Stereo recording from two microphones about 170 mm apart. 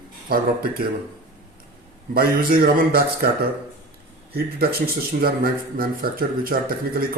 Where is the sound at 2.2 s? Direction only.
60° right (ahead or behind).